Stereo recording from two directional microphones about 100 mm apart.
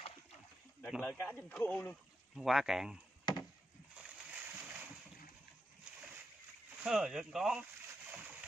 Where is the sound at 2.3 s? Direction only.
5° right (ahead or behind).